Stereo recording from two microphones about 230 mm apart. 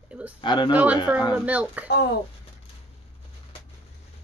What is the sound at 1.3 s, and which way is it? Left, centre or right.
Speech, centre.